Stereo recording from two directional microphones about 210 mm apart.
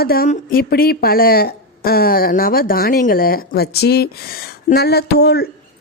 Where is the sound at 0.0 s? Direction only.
45° left (ahead or behind).